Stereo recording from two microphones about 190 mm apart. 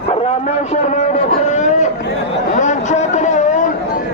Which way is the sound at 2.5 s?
40° left (ahead or behind).